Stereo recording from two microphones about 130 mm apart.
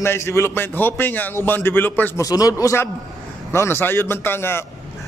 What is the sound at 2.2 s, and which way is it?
A man's voice, 30° left (ahead or behind).